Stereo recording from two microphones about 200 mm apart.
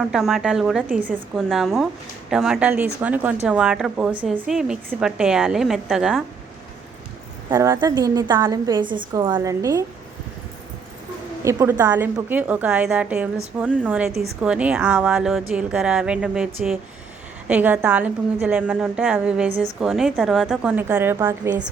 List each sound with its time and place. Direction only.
0.0 s a woman's voice: centre (ahead or behind)
7.5 s a woman's voice: 15° right (ahead or behind)
11.4 s a woman's voice: 10° right (ahead or behind)